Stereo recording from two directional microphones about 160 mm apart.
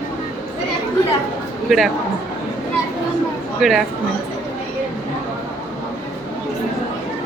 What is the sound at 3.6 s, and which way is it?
Speech, centre (ahead or behind).